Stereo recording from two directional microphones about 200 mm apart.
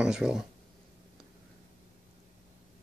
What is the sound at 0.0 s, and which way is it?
Speech, centre (ahead or behind).